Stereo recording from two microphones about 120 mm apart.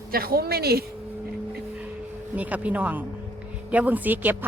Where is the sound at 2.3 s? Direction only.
10° right (ahead or behind).